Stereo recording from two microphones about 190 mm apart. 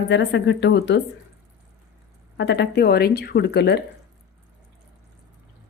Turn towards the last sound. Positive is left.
turn(degrees=60)  # may be behind; listen again after turning